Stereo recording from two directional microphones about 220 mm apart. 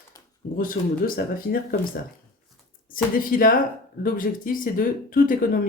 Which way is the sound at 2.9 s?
40° left (ahead or behind).